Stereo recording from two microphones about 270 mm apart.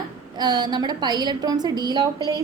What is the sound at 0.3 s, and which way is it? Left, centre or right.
A woman's voice, centre.